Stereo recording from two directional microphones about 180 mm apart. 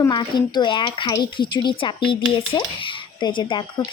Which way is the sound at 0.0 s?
25° left (ahead or behind).